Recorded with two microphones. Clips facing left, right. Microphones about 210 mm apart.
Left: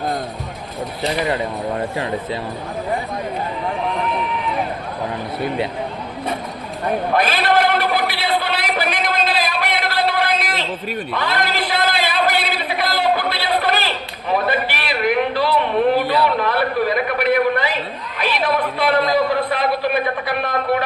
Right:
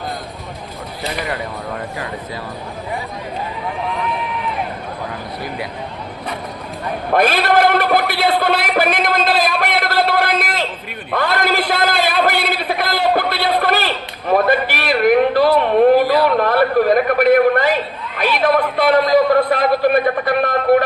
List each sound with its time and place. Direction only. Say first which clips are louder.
1.0 s speech: left 4 dB; 25° left (ahead or behind)
7.2 s a sound: right 5 dB; 45° right (ahead or behind)
11.1 s a man's voice: right 6 dB; 50° right (ahead or behind)